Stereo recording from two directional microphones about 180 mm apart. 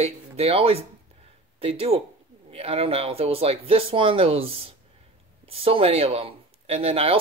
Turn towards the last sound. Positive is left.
turn(degrees=-35)  # may be behind; listen again after turning